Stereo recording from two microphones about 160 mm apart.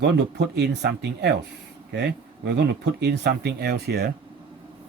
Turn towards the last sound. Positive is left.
turn(degrees=-80)